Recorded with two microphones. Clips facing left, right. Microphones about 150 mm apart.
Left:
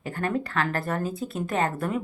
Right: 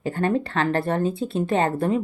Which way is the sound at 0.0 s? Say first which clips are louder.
Right 5 dB; 30° right (ahead or behind).